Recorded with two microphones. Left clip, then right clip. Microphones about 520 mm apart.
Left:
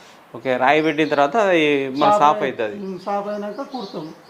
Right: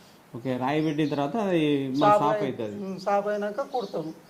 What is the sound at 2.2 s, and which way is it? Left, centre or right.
Speech, left.